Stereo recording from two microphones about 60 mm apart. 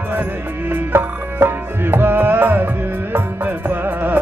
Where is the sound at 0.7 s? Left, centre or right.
Right.